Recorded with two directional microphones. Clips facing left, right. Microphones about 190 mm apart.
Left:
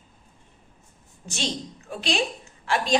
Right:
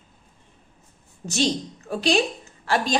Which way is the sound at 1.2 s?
40° right (ahead or behind).